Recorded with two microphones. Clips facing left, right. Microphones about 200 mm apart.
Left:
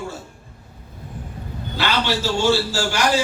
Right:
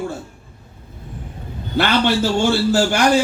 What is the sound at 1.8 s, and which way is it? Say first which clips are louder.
A man's voice: right 6 dB; 55° right (ahead or behind).